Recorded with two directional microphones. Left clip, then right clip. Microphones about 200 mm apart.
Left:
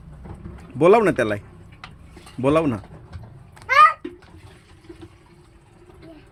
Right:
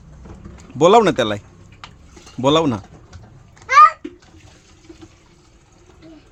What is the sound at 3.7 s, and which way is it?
Babbling, 10° right (ahead or behind).